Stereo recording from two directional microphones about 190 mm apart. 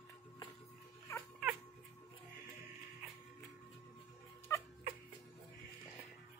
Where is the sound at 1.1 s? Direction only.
15° left (ahead or behind).